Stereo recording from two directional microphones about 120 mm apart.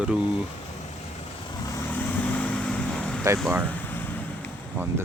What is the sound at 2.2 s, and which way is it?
Vehicle, 10° left (ahead or behind).